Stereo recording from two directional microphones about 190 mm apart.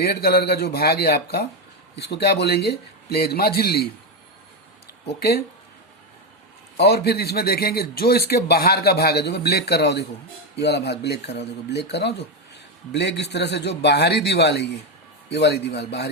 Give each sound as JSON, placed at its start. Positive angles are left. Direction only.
{"t": 0.0, "sound": "speech", "side_deg": 55}
{"t": 6.7, "sound": "speech", "side_deg": 55}